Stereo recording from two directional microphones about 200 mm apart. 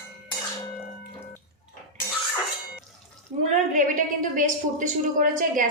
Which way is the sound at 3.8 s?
40° right (ahead or behind).